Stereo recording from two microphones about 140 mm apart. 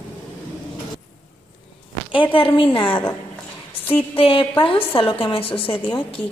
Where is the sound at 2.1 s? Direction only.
35° left (ahead or behind).